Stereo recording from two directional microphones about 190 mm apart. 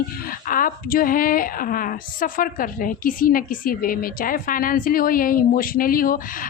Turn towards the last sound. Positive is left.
turn(degrees=50)  # may be behind; listen again after turning